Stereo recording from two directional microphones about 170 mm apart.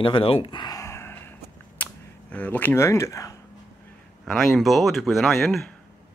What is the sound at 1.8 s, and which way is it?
Speech, 10° left (ahead or behind).